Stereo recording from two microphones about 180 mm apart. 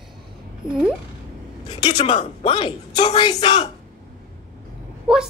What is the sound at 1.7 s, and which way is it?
A woman's voice, 30° left (ahead or behind).